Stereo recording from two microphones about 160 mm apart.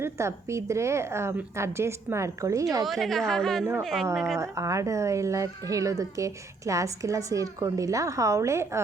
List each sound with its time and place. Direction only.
0.0 s a woman's voice: 15° right (ahead or behind)
2.8 s a woman's voice: centre (ahead or behind)
4.4 s speech: 20° right (ahead or behind)